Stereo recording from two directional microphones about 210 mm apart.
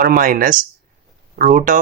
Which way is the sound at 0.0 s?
40° right (ahead or behind).